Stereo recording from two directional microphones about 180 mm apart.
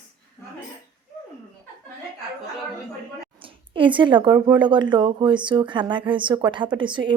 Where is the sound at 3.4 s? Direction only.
30° right (ahead or behind).